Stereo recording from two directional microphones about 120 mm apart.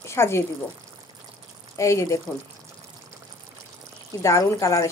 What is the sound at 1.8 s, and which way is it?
Speech, 25° left (ahead or behind).